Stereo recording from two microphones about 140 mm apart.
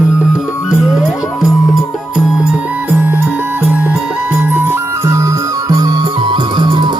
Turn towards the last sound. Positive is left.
turn(degrees=-30)  # may be behind; listen again after turning